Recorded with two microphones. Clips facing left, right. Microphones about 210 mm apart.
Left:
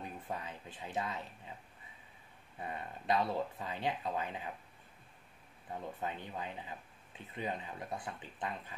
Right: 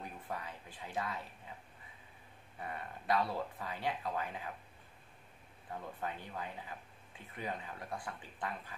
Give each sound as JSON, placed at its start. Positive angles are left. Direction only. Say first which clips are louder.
{"t": 0.0, "sound": "speech", "louder": "left 2 dB", "side_deg": 20}
{"t": 2.6, "sound": "speech", "louder": "left 1 dB", "side_deg": 20}
{"t": 5.9, "sound": "speech", "louder": "even", "side_deg": 20}